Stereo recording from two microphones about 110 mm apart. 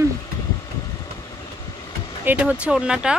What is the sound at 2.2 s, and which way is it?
Speech, 10° right (ahead or behind).